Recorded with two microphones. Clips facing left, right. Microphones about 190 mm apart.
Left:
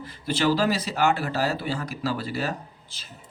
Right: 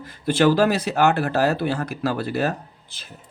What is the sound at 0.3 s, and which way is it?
Speech, 50° right (ahead or behind).